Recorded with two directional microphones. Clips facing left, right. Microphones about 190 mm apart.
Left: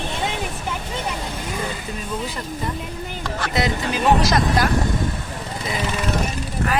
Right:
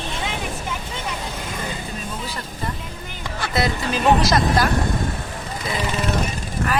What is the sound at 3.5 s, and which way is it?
Speech, 20° left (ahead or behind).